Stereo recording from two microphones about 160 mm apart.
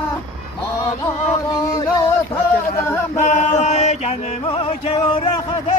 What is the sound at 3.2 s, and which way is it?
Music, 45° left (ahead or behind).